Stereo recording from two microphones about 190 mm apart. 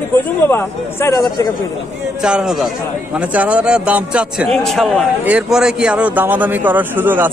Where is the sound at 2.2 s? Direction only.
5° right (ahead or behind).